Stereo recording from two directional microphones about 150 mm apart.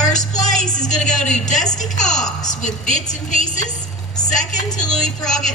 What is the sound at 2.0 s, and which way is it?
A woman's voice, 55° left (ahead or behind).